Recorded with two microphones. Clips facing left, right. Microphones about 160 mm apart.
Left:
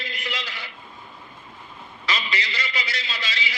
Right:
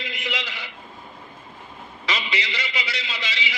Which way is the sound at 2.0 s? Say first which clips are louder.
Right 1 dB; 20° right (ahead or behind).